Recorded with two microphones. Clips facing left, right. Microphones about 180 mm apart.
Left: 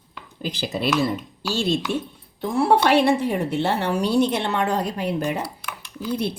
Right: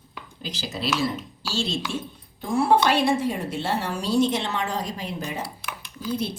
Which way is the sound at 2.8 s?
65° left (ahead or behind).